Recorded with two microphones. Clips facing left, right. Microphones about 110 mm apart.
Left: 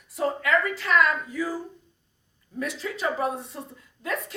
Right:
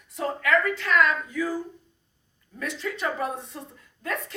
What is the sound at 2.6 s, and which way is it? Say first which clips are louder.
Speech: even; 5° left (ahead or behind).